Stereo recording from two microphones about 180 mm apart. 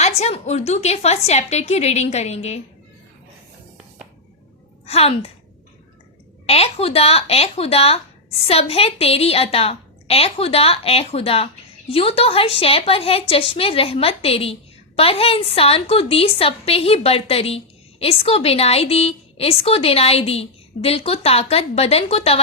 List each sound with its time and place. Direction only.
0.0 s a woman's voice: 35° left (ahead or behind)
4.9 s a woman's voice: 35° left (ahead or behind)
6.4 s a woman's voice: 35° left (ahead or behind)